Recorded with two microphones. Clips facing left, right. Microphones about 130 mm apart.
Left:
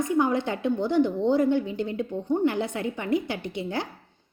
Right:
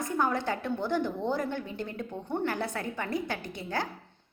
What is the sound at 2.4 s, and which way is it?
A woman's voice, 20° left (ahead or behind).